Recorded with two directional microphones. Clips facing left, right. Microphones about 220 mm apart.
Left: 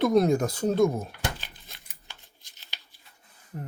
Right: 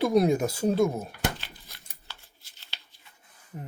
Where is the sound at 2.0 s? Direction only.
15° left (ahead or behind).